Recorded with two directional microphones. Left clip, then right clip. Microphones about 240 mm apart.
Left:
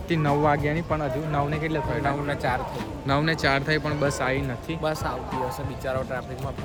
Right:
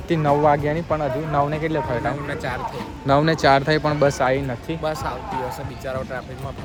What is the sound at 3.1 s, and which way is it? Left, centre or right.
Speech, centre.